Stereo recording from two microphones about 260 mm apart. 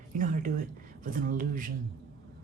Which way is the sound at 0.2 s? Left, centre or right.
Right.